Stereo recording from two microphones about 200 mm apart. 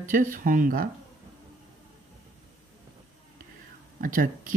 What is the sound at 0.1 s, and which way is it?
Speech, 40° right (ahead or behind).